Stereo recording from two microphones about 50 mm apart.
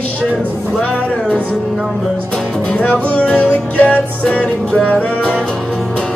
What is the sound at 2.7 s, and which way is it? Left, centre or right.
Music, left.